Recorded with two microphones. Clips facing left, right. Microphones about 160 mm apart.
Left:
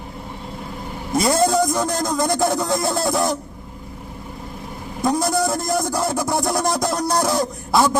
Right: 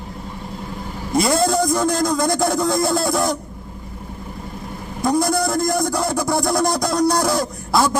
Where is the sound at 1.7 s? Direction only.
20° left (ahead or behind).